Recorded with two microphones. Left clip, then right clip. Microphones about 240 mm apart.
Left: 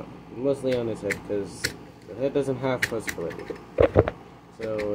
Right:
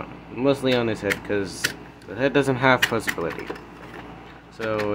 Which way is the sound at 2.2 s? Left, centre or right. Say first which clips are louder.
Right 5 dB; right.